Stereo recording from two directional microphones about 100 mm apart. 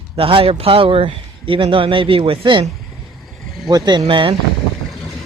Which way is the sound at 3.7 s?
50° right (ahead or behind).